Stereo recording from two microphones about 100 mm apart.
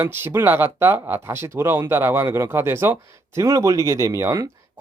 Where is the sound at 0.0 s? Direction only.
20° right (ahead or behind).